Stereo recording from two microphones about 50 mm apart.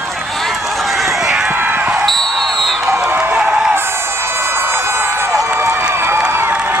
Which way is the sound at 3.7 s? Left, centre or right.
Right.